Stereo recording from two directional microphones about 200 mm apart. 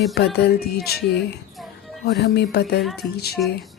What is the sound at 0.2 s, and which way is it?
Speech, 55° left (ahead or behind).